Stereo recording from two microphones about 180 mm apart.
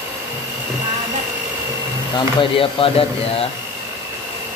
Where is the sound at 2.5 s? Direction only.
30° left (ahead or behind).